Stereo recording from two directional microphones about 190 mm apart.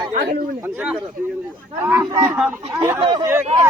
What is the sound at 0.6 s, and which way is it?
Speech, 10° right (ahead or behind).